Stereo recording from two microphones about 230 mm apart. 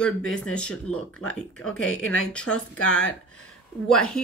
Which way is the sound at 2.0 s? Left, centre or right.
Left.